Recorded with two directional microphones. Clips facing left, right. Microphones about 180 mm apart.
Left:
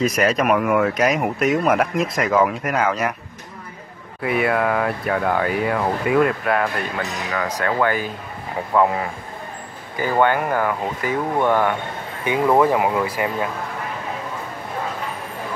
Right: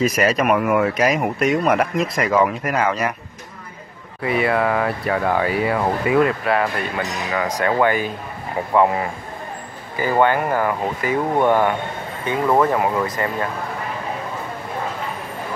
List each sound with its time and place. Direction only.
0.0 s speech: 5° right (ahead or behind)
4.2 s speech: centre (ahead or behind); by 8.1 s 15° right (ahead or behind)
9.9 s speech: 10° right (ahead or behind)
12.3 s speech: 10° left (ahead or behind)